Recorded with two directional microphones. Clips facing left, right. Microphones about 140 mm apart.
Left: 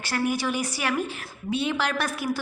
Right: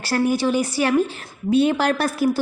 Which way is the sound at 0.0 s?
35° right (ahead or behind).